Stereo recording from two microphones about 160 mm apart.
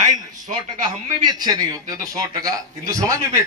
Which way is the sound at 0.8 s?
25° right (ahead or behind).